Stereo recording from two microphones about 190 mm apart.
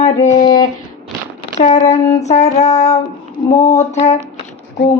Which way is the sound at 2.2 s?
35° left (ahead or behind).